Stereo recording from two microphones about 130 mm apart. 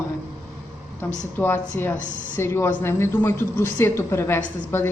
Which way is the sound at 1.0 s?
15° left (ahead or behind).